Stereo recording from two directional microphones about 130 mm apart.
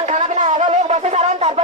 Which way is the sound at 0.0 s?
75° right (ahead or behind).